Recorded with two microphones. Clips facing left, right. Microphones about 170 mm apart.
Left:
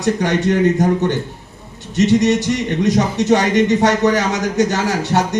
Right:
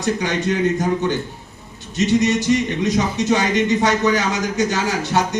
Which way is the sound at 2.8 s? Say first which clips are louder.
Left 3 dB; 65° left (ahead or behind).